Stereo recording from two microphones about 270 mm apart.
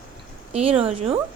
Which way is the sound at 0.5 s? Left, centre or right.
Right.